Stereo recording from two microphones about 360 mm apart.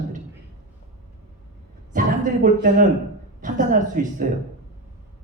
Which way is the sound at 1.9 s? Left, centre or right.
Right.